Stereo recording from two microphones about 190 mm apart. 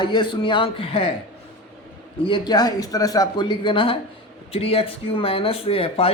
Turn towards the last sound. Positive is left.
turn(degrees=30)  # may be behind; listen again after turning